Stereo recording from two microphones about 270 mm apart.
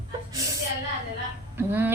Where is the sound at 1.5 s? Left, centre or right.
Centre.